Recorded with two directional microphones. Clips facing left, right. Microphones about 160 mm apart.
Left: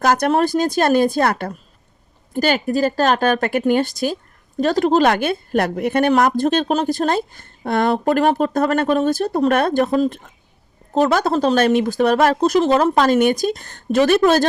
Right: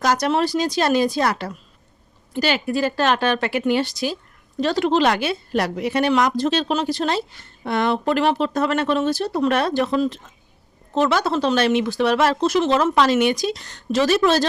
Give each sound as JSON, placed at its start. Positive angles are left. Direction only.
{"t": 0.0, "sound": "speech", "side_deg": 55}